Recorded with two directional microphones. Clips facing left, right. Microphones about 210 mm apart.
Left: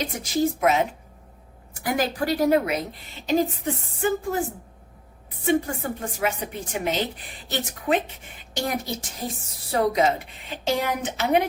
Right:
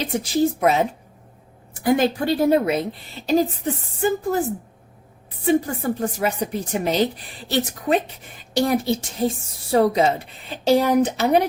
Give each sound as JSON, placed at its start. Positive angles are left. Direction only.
{"t": 0.0, "sound": "a woman's voice", "side_deg": -30}
{"t": 6.0, "sound": "a woman's voice", "side_deg": -40}